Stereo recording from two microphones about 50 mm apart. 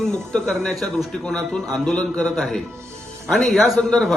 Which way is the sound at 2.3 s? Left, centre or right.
Centre.